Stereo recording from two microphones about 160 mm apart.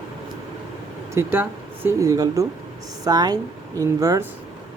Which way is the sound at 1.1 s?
15° right (ahead or behind).